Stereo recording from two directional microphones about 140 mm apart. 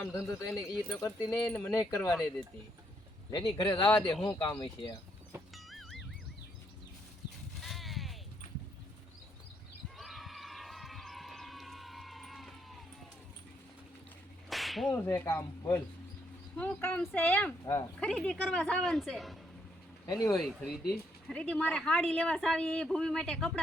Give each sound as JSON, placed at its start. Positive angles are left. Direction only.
{"t": 0.0, "sound": "speech", "side_deg": 15}
{"t": 2.0, "sound": "speech", "side_deg": 0}
{"t": 3.3, "sound": "speech", "side_deg": 30}
{"t": 5.5, "sound": "music", "side_deg": 0}
{"t": 7.6, "sound": "a sound", "side_deg": 0}
{"t": 10.0, "sound": "a sound", "side_deg": 0}
{"t": 14.5, "sound": "whip", "side_deg": 0}
{"t": 14.8, "sound": "speech", "side_deg": 20}
{"t": 16.6, "sound": "speech", "side_deg": 10}
{"t": 20.1, "sound": "speech", "side_deg": 25}
{"t": 21.2, "sound": "speech", "side_deg": 5}